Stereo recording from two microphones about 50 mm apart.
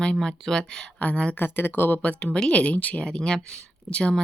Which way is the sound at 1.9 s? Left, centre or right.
Left.